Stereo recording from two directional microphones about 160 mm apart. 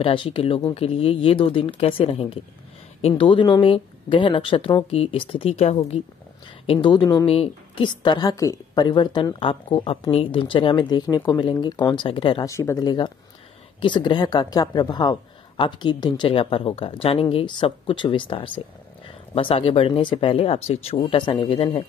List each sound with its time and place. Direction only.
0.0 s a woman's voice: 30° left (ahead or behind)
7.2 s a woman's voice: 40° left (ahead or behind)
12.4 s a woman's voice: 20° left (ahead or behind); by 21.8 s 35° left (ahead or behind)